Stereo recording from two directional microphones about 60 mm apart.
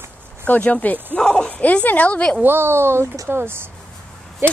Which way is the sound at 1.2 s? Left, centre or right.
Centre.